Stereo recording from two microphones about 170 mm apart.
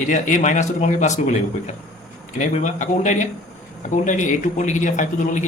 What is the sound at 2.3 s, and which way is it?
A man's voice, 45° left (ahead or behind).